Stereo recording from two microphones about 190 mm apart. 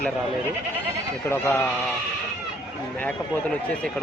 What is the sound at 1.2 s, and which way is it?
Speech, 10° left (ahead or behind).